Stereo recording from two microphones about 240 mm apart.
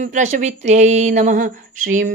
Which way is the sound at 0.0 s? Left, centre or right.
Right.